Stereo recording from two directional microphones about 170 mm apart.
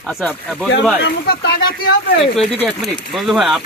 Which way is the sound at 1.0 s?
65° left (ahead or behind).